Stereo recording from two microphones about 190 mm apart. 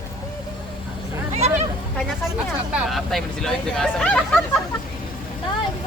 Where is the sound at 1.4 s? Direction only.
35° right (ahead or behind).